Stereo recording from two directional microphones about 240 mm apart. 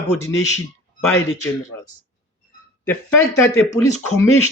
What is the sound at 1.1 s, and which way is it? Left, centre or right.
Speech, left.